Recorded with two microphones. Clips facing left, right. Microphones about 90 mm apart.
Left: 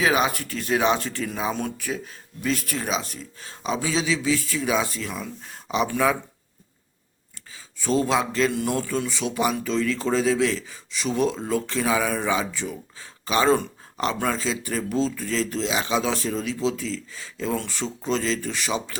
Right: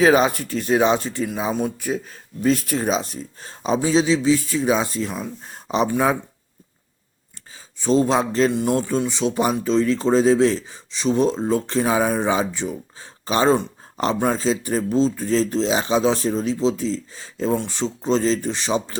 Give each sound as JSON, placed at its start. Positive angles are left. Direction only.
{"t": 0.0, "sound": "speech", "side_deg": -35}
{"t": 2.4, "sound": "a man's voice", "side_deg": -35}
{"t": 7.8, "sound": "a man's voice", "side_deg": -25}